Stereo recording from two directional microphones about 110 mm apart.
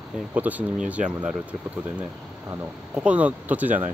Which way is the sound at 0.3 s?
15° right (ahead or behind).